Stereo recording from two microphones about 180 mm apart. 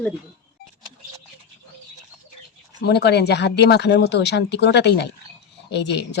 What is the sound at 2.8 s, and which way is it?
Speech, 65° left (ahead or behind).